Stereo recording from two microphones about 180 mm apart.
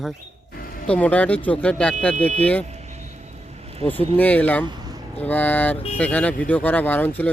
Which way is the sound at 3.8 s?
10° left (ahead or behind).